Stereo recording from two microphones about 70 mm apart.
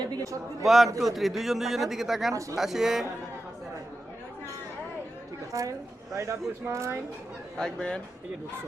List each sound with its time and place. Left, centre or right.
0.6 s speech: centre
5.5 s a woman's voice: right
7.5 s speech: centre